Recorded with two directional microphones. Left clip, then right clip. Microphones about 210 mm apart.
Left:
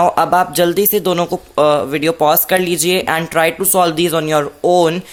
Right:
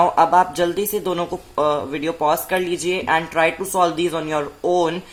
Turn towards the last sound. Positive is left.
turn(degrees=35)  # may be behind; listen again after turning